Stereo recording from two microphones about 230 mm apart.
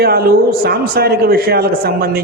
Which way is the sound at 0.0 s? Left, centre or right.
Right.